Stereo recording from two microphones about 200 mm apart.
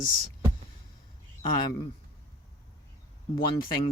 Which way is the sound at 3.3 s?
45° left (ahead or behind).